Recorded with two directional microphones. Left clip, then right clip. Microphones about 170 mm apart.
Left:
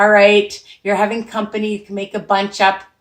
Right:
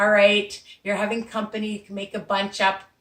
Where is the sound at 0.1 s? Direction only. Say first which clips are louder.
Left 7 dB; 15° right (ahead or behind).